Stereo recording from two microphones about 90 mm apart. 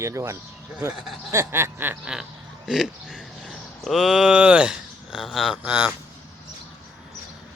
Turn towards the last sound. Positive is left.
turn(degrees=-25)  # may be behind; listen again after turning